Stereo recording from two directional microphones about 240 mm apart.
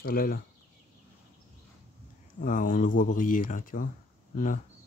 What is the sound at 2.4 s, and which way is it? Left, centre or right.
Speech, left.